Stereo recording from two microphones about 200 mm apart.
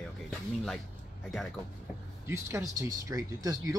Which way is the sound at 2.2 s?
15° right (ahead or behind).